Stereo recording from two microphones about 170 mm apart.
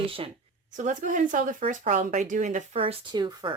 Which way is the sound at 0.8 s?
50° right (ahead or behind).